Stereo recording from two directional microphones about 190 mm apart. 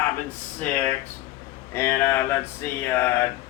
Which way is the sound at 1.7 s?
15° left (ahead or behind).